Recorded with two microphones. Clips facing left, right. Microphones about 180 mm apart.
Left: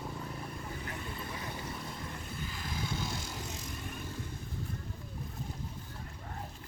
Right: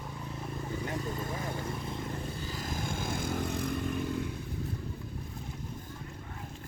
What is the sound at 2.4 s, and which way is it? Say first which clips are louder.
Vehicle: right 3 dB; 40° right (ahead or behind).